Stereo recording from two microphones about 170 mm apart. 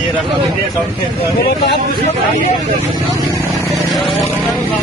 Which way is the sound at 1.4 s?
80° left.